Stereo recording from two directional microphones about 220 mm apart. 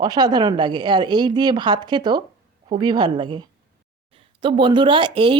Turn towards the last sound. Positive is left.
turn(degrees=-25)  # may be behind; listen again after turning